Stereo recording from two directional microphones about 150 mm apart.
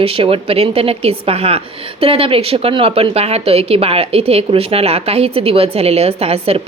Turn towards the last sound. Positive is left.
turn(degrees=-40)  # may be behind; listen again after turning